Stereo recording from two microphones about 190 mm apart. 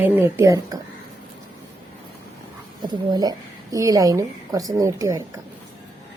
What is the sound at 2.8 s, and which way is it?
Speech, 20° right (ahead or behind).